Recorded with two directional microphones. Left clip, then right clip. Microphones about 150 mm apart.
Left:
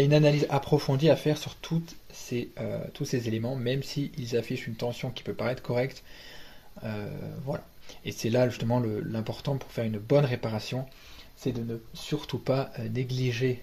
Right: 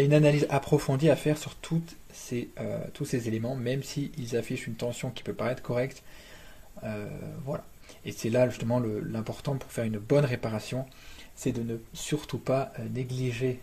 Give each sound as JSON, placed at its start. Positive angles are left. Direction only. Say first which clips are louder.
{"t": 0.0, "sound": "speech", "louder": "even", "side_deg": -5}
{"t": 11.4, "sound": "speech", "louder": "right 1 dB", "side_deg": -20}
{"t": 12.4, "sound": "speech", "louder": "right 1 dB", "side_deg": 10}